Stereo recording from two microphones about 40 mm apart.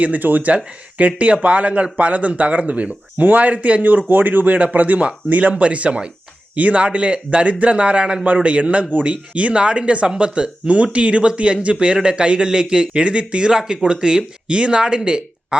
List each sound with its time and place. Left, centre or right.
0.0 s speech: right
0.5 s speech: right